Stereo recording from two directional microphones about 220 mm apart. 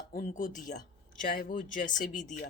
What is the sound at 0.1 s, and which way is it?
Speech, 35° left (ahead or behind).